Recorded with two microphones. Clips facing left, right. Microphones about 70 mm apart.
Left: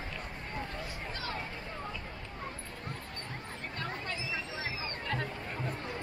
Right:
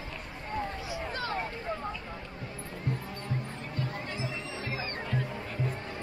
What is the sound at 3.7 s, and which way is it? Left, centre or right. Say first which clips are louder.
Music: right 2 dB; left.